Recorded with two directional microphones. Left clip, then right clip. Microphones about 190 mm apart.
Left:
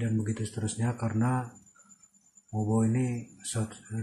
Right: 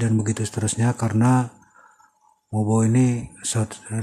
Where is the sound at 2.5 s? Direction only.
40° right (ahead or behind).